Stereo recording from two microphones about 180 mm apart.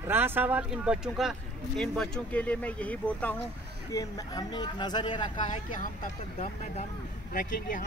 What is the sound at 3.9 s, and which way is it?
Speech, 20° left (ahead or behind).